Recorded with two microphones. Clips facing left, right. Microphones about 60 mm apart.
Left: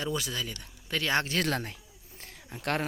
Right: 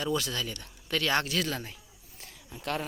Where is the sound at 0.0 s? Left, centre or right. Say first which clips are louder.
Right 2 dB; centre.